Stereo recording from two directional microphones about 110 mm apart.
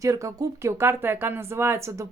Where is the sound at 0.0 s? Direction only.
30° right (ahead or behind).